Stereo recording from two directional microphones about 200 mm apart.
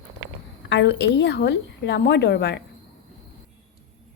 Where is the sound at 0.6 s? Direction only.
60° left (ahead or behind).